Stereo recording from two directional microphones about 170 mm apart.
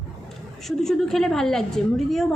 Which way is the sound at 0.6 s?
Centre (ahead or behind).